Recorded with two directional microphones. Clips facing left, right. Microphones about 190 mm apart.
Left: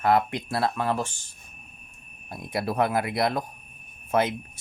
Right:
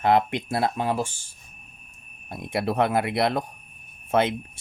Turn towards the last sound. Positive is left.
turn(degrees=-25)  # may be behind; listen again after turning